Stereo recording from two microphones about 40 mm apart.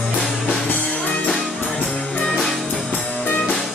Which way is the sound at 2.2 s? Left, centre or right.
Centre.